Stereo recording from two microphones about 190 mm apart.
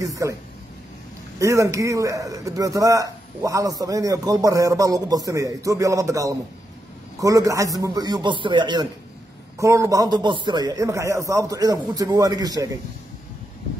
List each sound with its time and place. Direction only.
0.0 s a man's voice: 15° right (ahead or behind)
1.4 s a man's voice: 15° right (ahead or behind)